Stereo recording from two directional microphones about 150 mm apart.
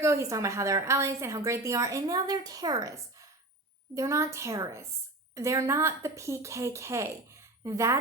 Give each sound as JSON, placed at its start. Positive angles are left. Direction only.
{"t": 0.0, "sound": "a woman's voice", "side_deg": -20}